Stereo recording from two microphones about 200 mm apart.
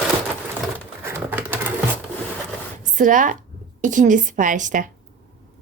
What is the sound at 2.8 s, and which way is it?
Speech, 40° right (ahead or behind).